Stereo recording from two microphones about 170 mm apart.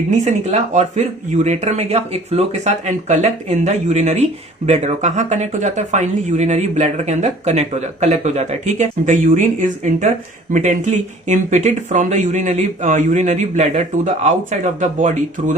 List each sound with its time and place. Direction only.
0.1 s speech: 45° right (ahead or behind)